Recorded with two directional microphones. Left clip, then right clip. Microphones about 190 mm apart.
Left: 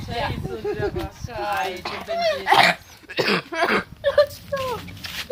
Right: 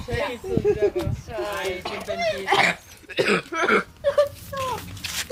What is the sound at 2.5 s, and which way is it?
Dog, 40° left (ahead or behind).